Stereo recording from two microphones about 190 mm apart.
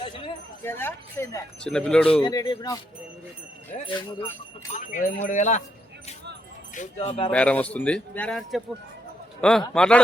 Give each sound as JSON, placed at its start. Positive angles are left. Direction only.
{"t": 0.0, "sound": "a sound", "side_deg": 30}
{"t": 0.6, "sound": "speech", "side_deg": 10}
{"t": 1.6, "sound": "a man's voice", "side_deg": 5}
{"t": 2.2, "sound": "speech", "side_deg": 20}
{"t": 4.7, "sound": "speech", "side_deg": 40}
{"t": 6.7, "sound": "speech", "side_deg": 30}
{"t": 7.3, "sound": "a man's voice", "side_deg": 5}